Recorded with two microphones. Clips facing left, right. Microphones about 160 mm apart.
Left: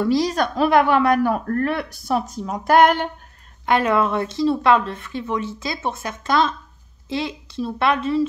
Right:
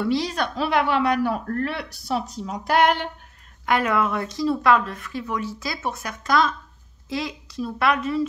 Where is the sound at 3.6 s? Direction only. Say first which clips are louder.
Left 3 dB; 25° left (ahead or behind).